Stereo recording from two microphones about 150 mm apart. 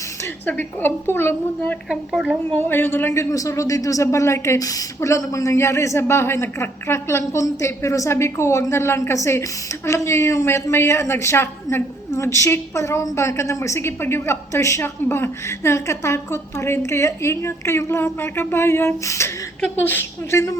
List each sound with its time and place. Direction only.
0.4 s a woman's voice: 10° left (ahead or behind)
1.9 s a woman's voice: 5° right (ahead or behind)
2.5 s a man's voice: 15° left (ahead or behind)